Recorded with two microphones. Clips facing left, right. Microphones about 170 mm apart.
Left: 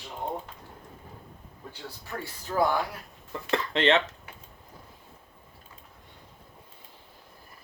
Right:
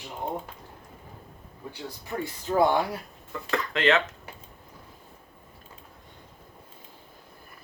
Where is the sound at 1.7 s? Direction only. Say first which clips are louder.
Right 4 dB; 15° right (ahead or behind).